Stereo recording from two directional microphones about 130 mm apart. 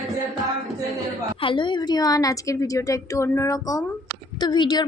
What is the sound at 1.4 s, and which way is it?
A woman's voice, 40° left (ahead or behind).